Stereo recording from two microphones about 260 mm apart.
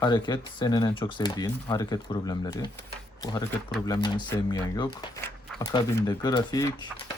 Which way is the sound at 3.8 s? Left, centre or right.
Centre.